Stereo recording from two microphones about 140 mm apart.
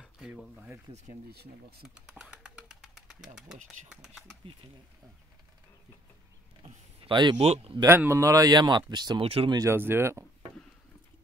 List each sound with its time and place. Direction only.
0.0 s speech: 5° right (ahead or behind)
2.0 s bird: 5° right (ahead or behind)
3.6 s speech: centre (ahead or behind)
4.4 s speech: 40° right (ahead or behind)
7.0 s speech: 35° right (ahead or behind)
7.3 s speech: 50° right (ahead or behind)
7.8 s speech: 15° right (ahead or behind)
9.2 s speech: 45° right (ahead or behind)
9.5 s speech: 20° right (ahead or behind)